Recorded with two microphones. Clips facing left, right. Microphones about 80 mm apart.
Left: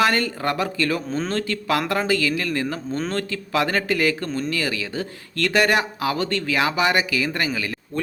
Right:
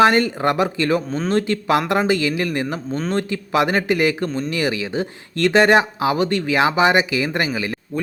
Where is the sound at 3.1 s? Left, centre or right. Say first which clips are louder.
Right 6 dB; right.